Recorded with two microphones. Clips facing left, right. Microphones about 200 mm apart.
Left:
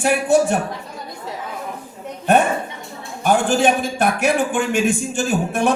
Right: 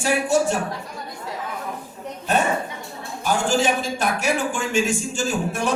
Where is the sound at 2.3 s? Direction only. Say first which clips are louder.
Left 6 dB; 60° left (ahead or behind).